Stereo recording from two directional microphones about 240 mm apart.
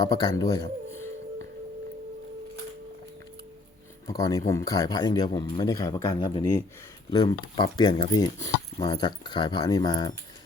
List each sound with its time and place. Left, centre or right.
0.0 s speech: centre
4.0 s speech: centre